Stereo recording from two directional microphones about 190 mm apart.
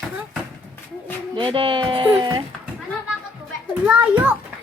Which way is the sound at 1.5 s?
25° right (ahead or behind).